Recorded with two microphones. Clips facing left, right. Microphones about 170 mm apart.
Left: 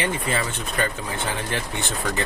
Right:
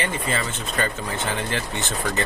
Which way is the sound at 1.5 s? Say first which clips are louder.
Right 1 dB; 15° left (ahead or behind).